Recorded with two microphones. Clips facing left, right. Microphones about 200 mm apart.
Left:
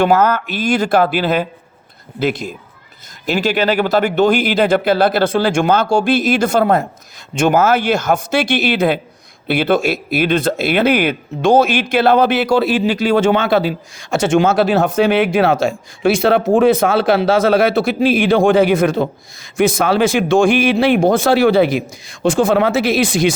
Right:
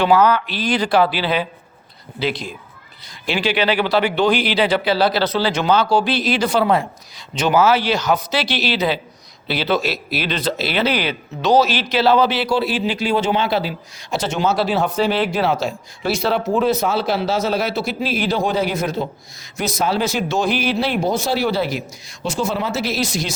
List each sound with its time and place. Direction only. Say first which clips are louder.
0.0 s a man's voice: left 2 dB; 45° left (ahead or behind)